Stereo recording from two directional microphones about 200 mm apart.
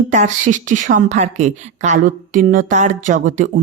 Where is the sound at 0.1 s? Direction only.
40° right (ahead or behind).